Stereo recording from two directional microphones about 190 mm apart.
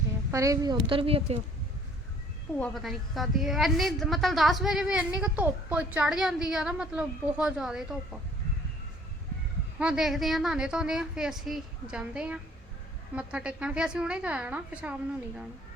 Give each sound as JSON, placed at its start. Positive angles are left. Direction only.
{"t": 0.3, "sound": "a woman's voice", "side_deg": -15}
{"t": 2.5, "sound": "a woman's voice", "side_deg": 5}
{"t": 9.7, "sound": "a woman's voice", "side_deg": -5}